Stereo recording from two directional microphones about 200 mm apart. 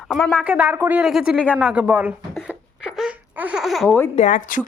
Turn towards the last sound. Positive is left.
turn(degrees=40)  # may be behind; listen again after turning